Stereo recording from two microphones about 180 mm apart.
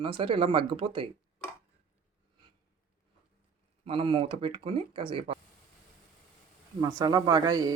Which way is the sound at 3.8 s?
30° right (ahead or behind).